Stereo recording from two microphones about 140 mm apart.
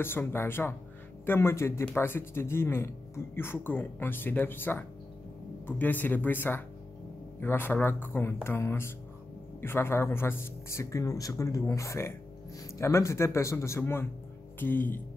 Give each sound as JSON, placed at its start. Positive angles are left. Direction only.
{"t": 0.0, "sound": "speech", "side_deg": 15}